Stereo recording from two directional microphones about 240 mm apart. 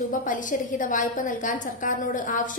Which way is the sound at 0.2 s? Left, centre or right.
Left.